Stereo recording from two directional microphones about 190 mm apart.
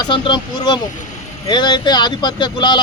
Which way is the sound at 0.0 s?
25° left (ahead or behind).